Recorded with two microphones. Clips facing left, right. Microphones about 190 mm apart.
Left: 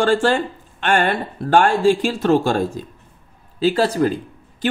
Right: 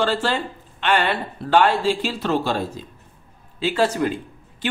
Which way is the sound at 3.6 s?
35° left (ahead or behind).